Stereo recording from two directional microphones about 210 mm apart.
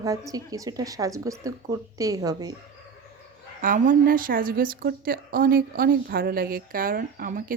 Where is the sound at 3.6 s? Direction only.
40° right (ahead or behind).